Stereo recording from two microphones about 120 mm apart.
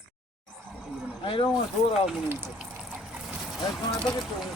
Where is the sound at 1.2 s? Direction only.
45° left (ahead or behind).